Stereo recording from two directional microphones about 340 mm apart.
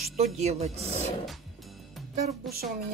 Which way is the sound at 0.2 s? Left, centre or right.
Centre.